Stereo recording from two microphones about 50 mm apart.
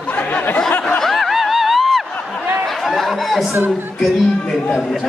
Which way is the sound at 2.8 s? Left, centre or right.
Centre.